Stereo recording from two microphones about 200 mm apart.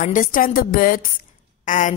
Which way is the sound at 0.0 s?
40° left (ahead or behind).